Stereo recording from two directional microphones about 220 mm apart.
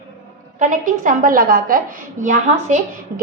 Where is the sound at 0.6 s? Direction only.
35° right (ahead or behind).